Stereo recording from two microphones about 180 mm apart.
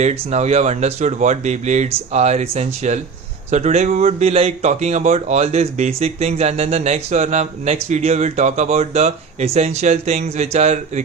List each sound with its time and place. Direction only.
0.0 s speech: 40° right (ahead or behind)